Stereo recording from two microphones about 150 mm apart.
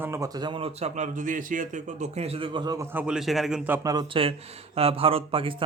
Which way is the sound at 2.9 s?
5° right (ahead or behind).